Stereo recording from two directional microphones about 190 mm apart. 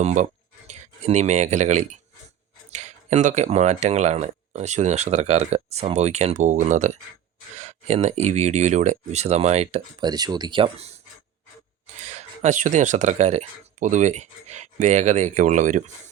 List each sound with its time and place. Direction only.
0.0 s speech: 40° right (ahead or behind)
10.0 s speech: 20° right (ahead or behind)
11.9 s speech: 35° right (ahead or behind)